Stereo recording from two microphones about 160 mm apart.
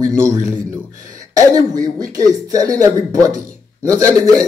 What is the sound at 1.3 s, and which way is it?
Speech, 25° right (ahead or behind).